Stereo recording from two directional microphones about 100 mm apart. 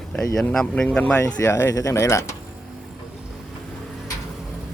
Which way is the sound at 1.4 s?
30° left (ahead or behind).